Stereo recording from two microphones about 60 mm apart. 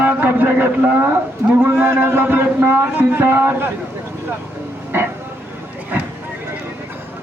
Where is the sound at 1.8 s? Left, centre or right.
Right.